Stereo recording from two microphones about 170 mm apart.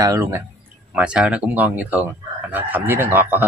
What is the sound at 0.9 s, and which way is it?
Speech, 5° right (ahead or behind).